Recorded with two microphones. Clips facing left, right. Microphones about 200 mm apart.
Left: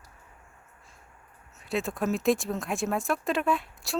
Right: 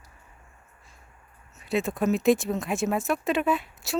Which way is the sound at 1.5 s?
Centre (ahead or behind).